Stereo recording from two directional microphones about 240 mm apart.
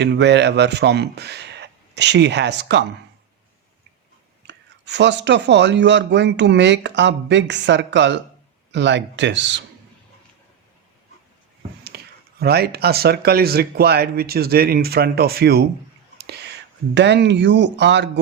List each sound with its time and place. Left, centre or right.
0.0 s speech: right
4.4 s speech: right
11.9 s a sound: right
12.4 s speech: right
16.1 s whispering: right
16.9 s speech: right